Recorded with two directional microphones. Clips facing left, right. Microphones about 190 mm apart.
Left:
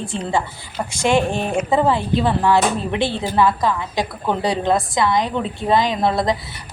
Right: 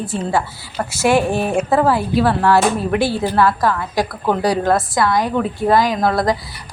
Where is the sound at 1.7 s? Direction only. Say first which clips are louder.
Right 1 dB; 20° left (ahead or behind).